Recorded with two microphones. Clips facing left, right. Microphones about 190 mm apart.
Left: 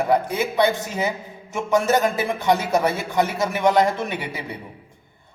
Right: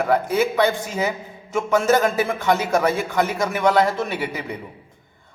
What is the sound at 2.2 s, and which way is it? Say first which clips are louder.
A man's voice: even; 15° left (ahead or behind).